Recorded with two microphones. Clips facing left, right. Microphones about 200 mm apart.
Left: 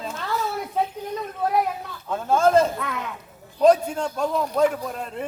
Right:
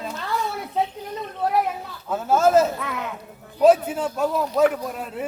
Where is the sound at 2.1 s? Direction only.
5° right (ahead or behind).